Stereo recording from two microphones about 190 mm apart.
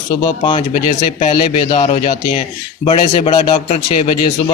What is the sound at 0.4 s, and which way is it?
A man's voice, 30° left (ahead or behind).